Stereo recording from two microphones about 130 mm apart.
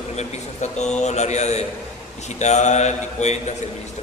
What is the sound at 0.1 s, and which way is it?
A man's voice, 60° left (ahead or behind).